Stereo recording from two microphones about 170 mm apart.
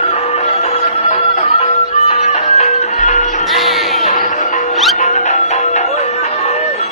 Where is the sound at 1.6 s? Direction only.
40° left (ahead or behind).